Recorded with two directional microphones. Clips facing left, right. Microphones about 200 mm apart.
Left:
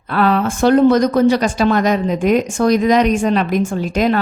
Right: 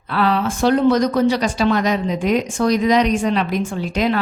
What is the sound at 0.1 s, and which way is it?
Speech, 50° left (ahead or behind).